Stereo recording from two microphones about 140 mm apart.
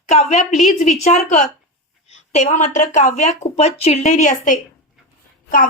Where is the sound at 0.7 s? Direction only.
55° left (ahead or behind).